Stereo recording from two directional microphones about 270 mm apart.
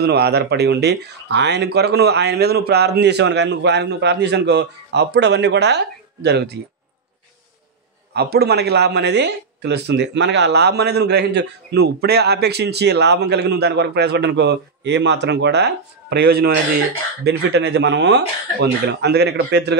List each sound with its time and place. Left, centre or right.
0.0 s a man's voice: right
8.1 s a man's voice: right